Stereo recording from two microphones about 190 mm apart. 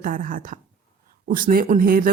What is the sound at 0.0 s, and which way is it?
Speech, 45° right (ahead or behind).